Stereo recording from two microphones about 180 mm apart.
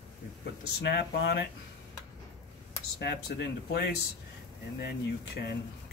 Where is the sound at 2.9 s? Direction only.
65° left (ahead or behind).